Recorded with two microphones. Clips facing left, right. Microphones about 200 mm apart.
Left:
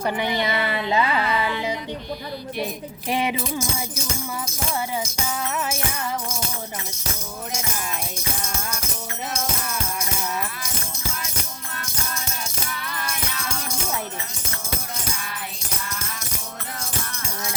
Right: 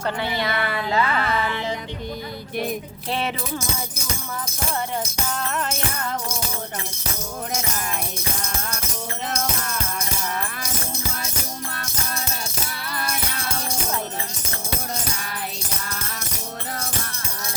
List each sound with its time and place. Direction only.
0.0 s speech: 15° left (ahead or behind)
3.1 s speech: 15° left (ahead or behind)
5.4 s music: 5° left (ahead or behind)
12.7 s music: 35° right (ahead or behind)